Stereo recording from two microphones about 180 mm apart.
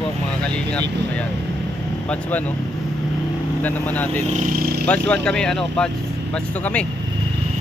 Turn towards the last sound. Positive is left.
turn(degrees=5)  # may be behind; listen again after turning